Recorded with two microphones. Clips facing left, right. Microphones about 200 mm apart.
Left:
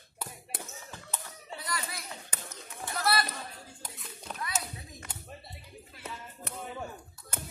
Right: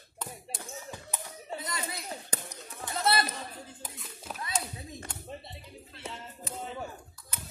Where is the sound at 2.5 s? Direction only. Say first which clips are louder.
Right 1 dB; 20° right (ahead or behind).